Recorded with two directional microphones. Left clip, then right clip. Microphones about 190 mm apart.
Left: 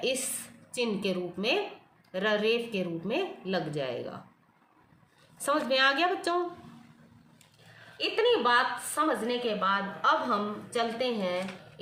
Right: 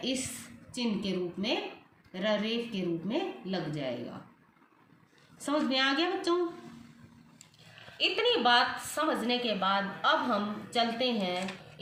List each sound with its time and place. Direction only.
0.0 s a woman's voice: 55° left (ahead or behind)
5.5 s a woman's voice: 55° left (ahead or behind)
7.9 s a woman's voice: 10° left (ahead or behind)